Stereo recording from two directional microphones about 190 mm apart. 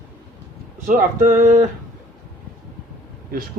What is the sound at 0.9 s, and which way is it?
Speech, 40° right (ahead or behind).